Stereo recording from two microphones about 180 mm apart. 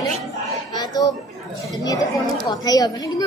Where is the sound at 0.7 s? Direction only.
20° left (ahead or behind).